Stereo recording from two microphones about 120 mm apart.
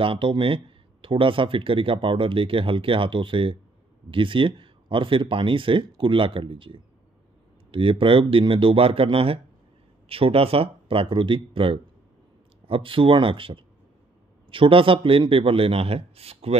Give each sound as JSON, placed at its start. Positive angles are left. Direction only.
{"t": 0.0, "sound": "speech", "side_deg": -45}